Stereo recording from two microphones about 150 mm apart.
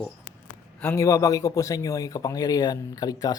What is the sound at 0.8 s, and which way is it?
A man's voice, 20° left (ahead or behind).